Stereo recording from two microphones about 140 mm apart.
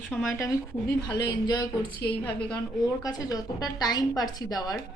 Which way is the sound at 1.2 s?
30° left (ahead or behind).